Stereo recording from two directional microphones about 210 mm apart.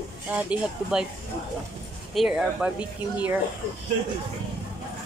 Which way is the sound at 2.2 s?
5° right (ahead or behind).